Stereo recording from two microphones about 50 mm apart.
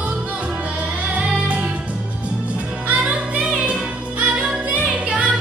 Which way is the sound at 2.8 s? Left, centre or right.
Right.